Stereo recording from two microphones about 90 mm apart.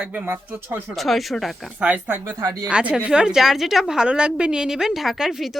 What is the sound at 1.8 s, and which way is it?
A woman's voice, 15° right (ahead or behind).